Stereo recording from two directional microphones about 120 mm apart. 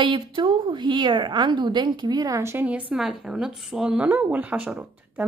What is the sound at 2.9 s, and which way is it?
A woman's voice, 5° right (ahead or behind).